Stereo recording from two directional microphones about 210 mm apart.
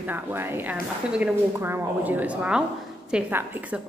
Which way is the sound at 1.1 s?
10° right (ahead or behind).